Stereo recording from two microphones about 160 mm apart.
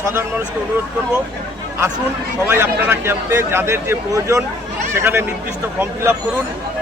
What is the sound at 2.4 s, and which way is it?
Speech, 15° right (ahead or behind).